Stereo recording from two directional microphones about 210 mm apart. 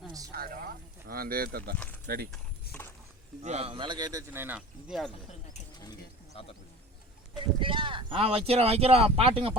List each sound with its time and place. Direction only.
0.3 s a sound: 45° right (ahead or behind)
2.0 s speech: 50° right (ahead or behind)
2.7 s mechanisms: 50° left (ahead or behind)
3.4 s a man's voice: 30° right (ahead or behind); by 5.1 s centre (ahead or behind)
5.8 s bird: 25° left (ahead or behind)
7.6 s speech: 25° right (ahead or behind)